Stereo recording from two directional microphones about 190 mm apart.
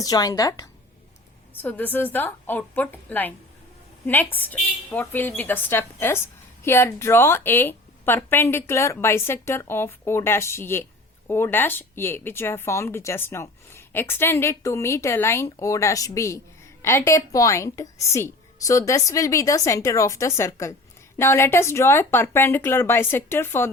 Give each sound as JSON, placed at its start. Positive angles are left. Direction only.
{"t": 0.0, "sound": "a woman's voice", "side_deg": 20}